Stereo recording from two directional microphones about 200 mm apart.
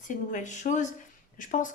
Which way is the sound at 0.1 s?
40° left (ahead or behind).